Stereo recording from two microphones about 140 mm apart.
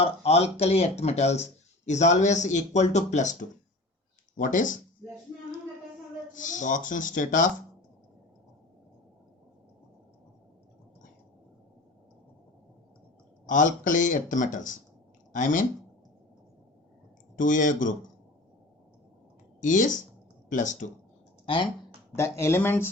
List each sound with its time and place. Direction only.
0.0 s speech: 45° left (ahead or behind)
4.4 s speech: 70° left (ahead or behind)
6.3 s speech: 65° left (ahead or behind)
13.5 s speech: 65° left (ahead or behind)
17.3 s speech: 70° left (ahead or behind)
19.6 s speech: 65° left (ahead or behind)
21.4 s speech: 40° left (ahead or behind)
22.1 s speech: 20° left (ahead or behind)